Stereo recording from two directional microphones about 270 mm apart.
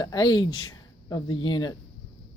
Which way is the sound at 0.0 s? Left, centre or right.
Centre.